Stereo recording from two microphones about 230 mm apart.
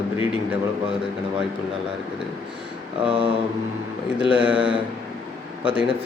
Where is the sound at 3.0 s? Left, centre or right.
Right.